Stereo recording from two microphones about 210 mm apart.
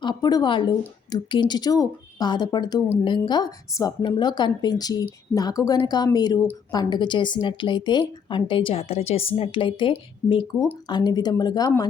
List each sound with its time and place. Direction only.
0.0 s speech: 20° left (ahead or behind)